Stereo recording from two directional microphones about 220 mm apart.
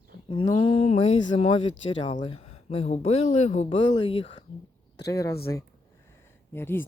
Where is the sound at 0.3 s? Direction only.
25° left (ahead or behind).